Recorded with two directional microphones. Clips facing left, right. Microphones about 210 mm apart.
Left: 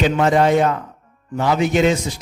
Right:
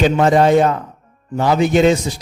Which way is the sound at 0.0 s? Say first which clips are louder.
Right 3 dB; 35° right (ahead or behind).